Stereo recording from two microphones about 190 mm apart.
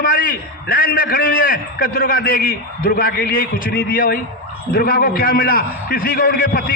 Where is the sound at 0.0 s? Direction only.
50° left (ahead or behind).